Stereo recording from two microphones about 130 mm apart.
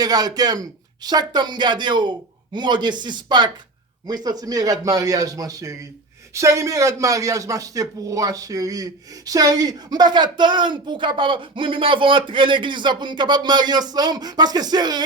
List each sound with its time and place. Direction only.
0.0 s a man's voice: 30° right (ahead or behind)